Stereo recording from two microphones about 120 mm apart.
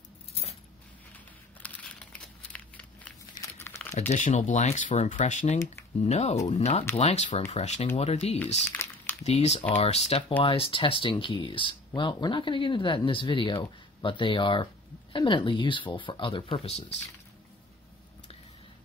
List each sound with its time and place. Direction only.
0.3 s keys jangling: 60° left (ahead or behind)
1.6 s crumpling: 10° left (ahead or behind)
2.5 s a sound: 10° left (ahead or behind)
3.5 s crumpling: 20° left (ahead or behind)
4.1 s speech: 75° left (ahead or behind)
6.0 s speech: 70° left (ahead or behind)
10.4 s speech: 50° left (ahead or behind)